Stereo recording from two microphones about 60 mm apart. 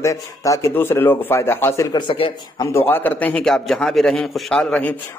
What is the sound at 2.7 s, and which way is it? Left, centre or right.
Speech, left.